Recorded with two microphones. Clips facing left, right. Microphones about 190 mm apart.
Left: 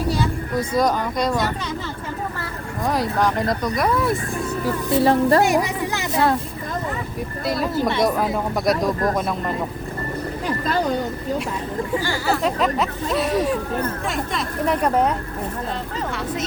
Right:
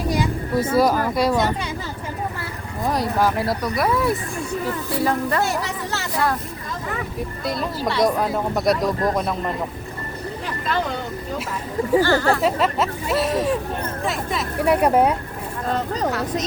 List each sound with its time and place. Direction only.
0.1 s speech: 10° right (ahead or behind)
2.8 s speech: centre (ahead or behind)
4.9 s speech: 25° left (ahead or behind)
5.4 s a sound: 15° left (ahead or behind)
7.4 s speech: centre (ahead or behind)
7.8 s speech: 20° left (ahead or behind)
8.0 s speech: centre (ahead or behind)
12.0 s speech: 10° left (ahead or behind); by 15.1 s 10° right (ahead or behind)
15.7 s vehicle: 40° right (ahead or behind)